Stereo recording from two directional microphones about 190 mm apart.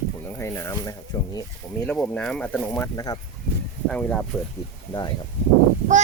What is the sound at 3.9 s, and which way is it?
Speech, 5° left (ahead or behind).